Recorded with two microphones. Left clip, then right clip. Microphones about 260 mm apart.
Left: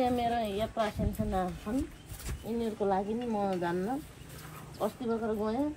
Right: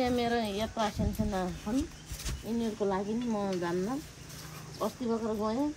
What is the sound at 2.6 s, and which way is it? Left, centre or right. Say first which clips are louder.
Speech: left 2 dB; centre.